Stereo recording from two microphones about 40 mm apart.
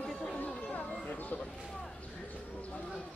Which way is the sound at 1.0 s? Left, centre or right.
Left.